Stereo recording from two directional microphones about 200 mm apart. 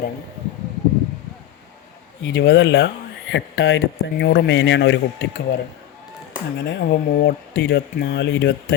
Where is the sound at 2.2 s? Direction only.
60° left (ahead or behind).